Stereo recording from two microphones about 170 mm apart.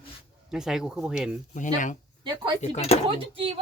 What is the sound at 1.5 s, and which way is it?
Speech, 50° left (ahead or behind).